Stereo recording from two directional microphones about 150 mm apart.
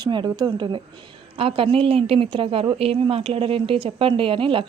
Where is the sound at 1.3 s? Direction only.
40° right (ahead or behind).